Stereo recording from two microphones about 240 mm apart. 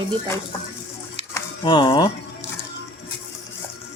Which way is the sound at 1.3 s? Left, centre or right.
Centre.